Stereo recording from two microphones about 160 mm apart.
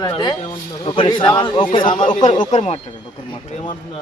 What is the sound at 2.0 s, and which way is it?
Speech, 50° left (ahead or behind).